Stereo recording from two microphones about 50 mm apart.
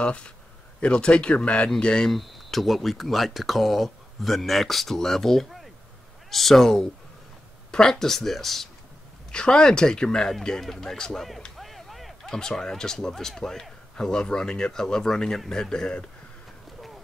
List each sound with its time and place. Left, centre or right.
0.0 s speech: centre
2.0 s speech: centre
9.3 s speech: centre
11.5 s a sound: centre
12.3 s speech: centre